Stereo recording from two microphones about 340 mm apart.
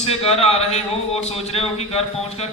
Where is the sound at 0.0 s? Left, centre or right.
Centre.